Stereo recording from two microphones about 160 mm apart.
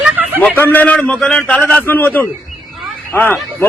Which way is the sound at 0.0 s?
10° right (ahead or behind).